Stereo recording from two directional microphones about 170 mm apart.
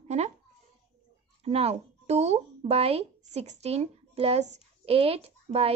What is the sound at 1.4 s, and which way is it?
A woman's voice, 40° right (ahead or behind).